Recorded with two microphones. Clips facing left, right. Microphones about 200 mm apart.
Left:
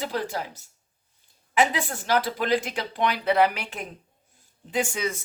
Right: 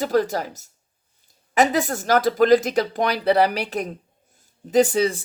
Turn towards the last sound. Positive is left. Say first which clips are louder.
# right 10 dB
turn(degrees=-35)  # may be behind; listen again after turning